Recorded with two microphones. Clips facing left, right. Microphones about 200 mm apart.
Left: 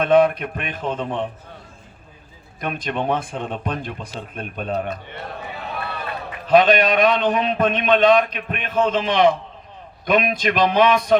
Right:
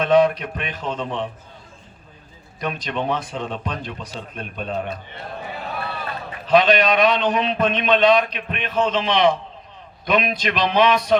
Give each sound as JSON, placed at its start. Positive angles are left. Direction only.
{"t": 0.0, "sound": "speech", "side_deg": 55}
{"t": 2.6, "sound": "speech", "side_deg": 50}
{"t": 6.5, "sound": "speech", "side_deg": 50}